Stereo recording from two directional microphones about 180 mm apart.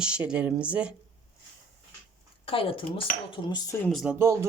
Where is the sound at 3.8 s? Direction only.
Centre (ahead or behind).